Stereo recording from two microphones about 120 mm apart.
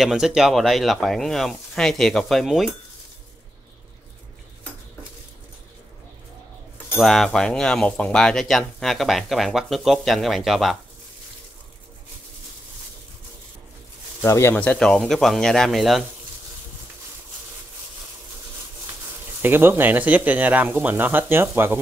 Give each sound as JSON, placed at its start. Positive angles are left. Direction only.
{"t": 0.0, "sound": "speech", "side_deg": -5}
{"t": 7.0, "sound": "speech", "side_deg": 0}
{"t": 14.2, "sound": "speech", "side_deg": 20}
{"t": 19.4, "sound": "speech", "side_deg": -15}